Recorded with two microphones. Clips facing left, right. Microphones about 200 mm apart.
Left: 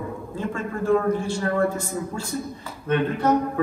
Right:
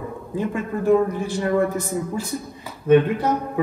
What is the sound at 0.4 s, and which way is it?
A man's voice, 15° right (ahead or behind).